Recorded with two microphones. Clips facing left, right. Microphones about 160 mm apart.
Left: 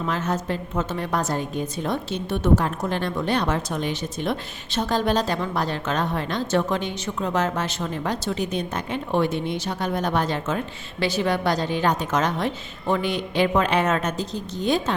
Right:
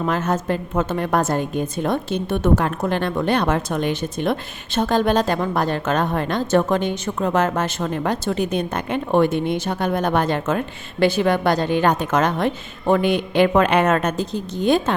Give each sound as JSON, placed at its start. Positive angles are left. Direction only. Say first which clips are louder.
{"t": 0.0, "sound": "a woman's voice", "louder": "right 4 dB", "side_deg": -50}